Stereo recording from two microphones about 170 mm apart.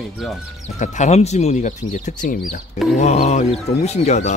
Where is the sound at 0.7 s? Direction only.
45° left (ahead or behind).